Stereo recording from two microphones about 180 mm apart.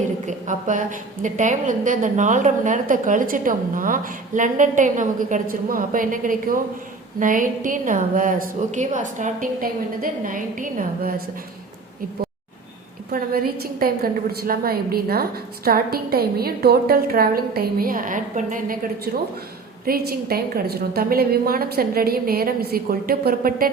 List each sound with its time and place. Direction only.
0.3 s a woman's voice: 45° right (ahead or behind)
13.1 s a woman's voice: 55° right (ahead or behind)